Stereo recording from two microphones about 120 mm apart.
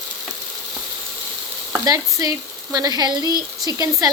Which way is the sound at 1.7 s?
25° right (ahead or behind).